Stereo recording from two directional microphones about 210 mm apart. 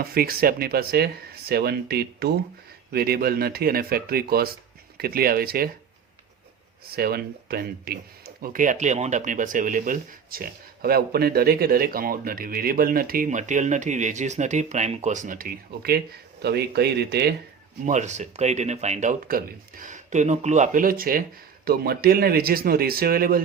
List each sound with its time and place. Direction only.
0.0 s speech: 45° right (ahead or behind)
6.9 s speech: 45° right (ahead or behind)
17.8 s speech: 35° right (ahead or behind)